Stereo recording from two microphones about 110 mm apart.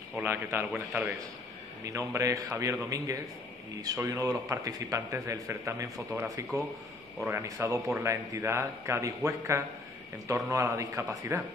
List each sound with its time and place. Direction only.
0.2 s a man's voice: 20° right (ahead or behind)
1.9 s a man's voice: 30° right (ahead or behind)